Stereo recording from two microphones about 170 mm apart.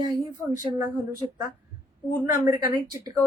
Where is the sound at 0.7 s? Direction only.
20° right (ahead or behind).